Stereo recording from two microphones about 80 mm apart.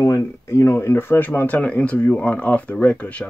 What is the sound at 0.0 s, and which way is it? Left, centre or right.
Speech, left.